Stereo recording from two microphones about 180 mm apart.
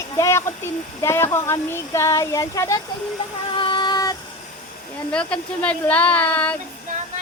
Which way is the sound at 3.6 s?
25° left (ahead or behind).